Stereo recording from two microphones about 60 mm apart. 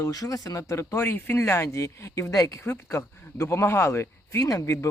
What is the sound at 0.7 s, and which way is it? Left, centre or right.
Speech, left.